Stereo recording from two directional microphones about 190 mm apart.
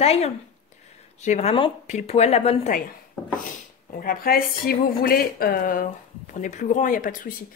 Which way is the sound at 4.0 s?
50° left (ahead or behind).